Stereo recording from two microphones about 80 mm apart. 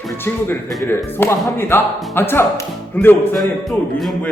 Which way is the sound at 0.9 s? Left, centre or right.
Left.